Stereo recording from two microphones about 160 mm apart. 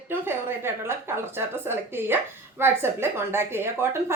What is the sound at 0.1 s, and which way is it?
A woman's voice, 15° right (ahead or behind).